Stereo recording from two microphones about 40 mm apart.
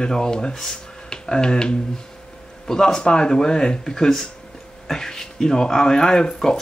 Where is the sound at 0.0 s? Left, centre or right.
Centre.